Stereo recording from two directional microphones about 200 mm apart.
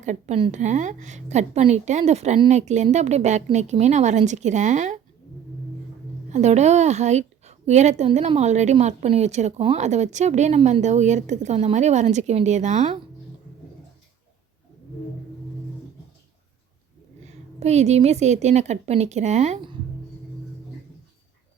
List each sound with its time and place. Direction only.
0.0 s a woman's voice: 35° right (ahead or behind)
6.3 s a woman's voice: 35° right (ahead or behind)
17.6 s a woman's voice: 35° right (ahead or behind)